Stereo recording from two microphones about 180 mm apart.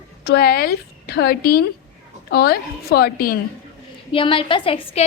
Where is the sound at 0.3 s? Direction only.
60° left (ahead or behind).